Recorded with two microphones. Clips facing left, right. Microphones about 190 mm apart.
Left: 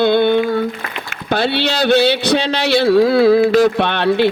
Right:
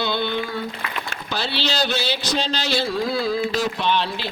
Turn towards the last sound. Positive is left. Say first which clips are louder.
# left 9 dB
turn(degrees=60)  # may be behind; listen again after turning